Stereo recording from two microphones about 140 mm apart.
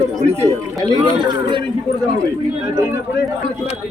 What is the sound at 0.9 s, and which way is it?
Speech, 30° right (ahead or behind).